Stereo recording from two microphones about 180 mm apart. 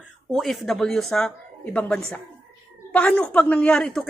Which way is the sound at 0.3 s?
Centre (ahead or behind).